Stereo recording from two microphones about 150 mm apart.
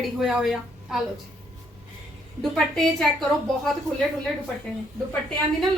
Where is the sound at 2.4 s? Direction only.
Centre (ahead or behind).